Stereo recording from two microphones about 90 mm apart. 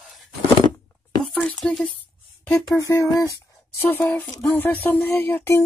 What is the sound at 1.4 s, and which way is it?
Speech, 15° left (ahead or behind).